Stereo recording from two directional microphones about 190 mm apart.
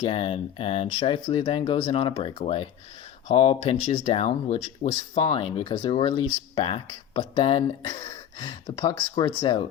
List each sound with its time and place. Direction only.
0.0 s speech: 30° left (ahead or behind)